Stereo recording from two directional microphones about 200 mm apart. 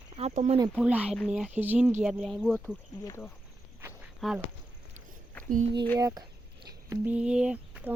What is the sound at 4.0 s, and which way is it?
Walk, 5° right (ahead or behind).